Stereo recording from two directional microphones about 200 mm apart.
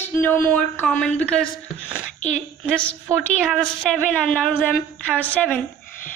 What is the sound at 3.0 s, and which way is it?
A woman's voice, 5° right (ahead or behind).